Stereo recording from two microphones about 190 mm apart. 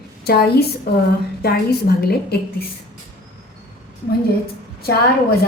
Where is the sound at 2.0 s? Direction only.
55° left (ahead or behind).